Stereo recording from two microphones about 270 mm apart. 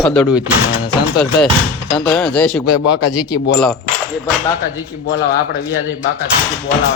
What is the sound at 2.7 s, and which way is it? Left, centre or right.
Speech, left.